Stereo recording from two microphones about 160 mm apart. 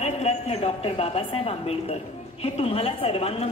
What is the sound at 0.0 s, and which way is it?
A woman's voice, 40° left (ahead or behind).